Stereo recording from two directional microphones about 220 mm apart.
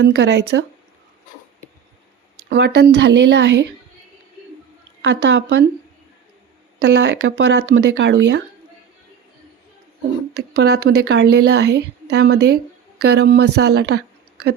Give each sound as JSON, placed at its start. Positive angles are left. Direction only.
{"t": 0.0, "sound": "a woman's voice", "side_deg": -50}
{"t": 2.5, "sound": "a woman's voice", "side_deg": -50}
{"t": 5.0, "sound": "speech", "side_deg": -55}
{"t": 6.8, "sound": "speech", "side_deg": -50}
{"t": 10.3, "sound": "a woman's voice", "side_deg": -50}